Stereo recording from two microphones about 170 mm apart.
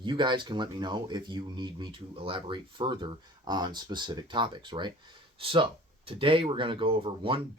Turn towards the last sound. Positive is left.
turn(degrees=-30)  # may be behind; listen again after turning